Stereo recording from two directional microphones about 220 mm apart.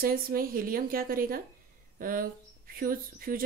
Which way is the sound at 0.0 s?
40° right (ahead or behind).